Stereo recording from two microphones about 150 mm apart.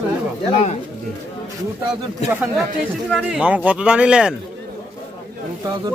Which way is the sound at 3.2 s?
5° right (ahead or behind).